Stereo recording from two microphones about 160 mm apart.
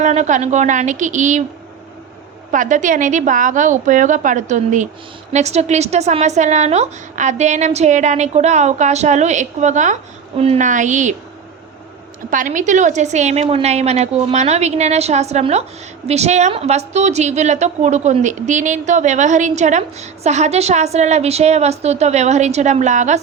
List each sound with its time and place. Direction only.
0.0 s a woman's voice: 45° right (ahead or behind)
2.5 s a woman's voice: 55° right (ahead or behind)
10.7 s a woman's voice: 50° right (ahead or behind)
12.3 s a woman's voice: 55° right (ahead or behind)